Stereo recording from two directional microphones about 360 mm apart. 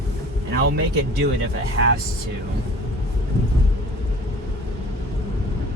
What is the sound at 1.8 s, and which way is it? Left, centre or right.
Speech, right.